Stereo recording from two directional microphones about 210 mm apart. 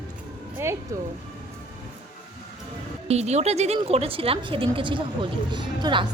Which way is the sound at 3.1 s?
30° right (ahead or behind).